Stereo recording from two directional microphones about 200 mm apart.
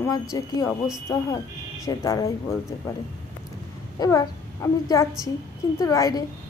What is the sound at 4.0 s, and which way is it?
A child's voice, 15° left (ahead or behind).